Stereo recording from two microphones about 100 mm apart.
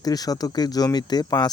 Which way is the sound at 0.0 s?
40° left (ahead or behind).